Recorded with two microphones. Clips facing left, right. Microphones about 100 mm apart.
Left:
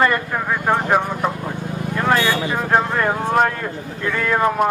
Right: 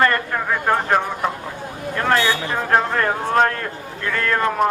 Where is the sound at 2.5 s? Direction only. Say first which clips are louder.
Even; 10° left (ahead or behind).